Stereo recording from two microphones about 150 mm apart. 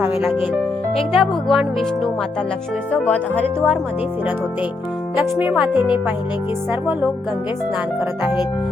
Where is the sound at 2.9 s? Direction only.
10° left (ahead or behind).